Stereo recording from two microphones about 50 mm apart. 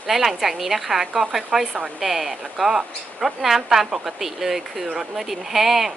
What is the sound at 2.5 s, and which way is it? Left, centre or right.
A woman's voice, centre.